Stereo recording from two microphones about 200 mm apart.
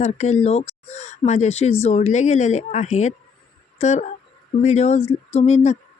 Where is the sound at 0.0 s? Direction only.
35° left (ahead or behind).